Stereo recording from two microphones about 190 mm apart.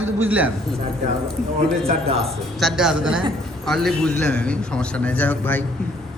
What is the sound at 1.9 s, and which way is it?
Speech, 30° right (ahead or behind).